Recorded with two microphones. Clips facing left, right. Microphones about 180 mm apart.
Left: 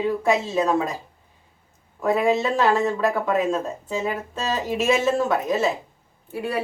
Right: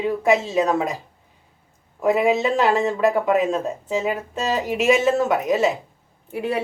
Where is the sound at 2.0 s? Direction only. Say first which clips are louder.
Right 2 dB; 15° right (ahead or behind).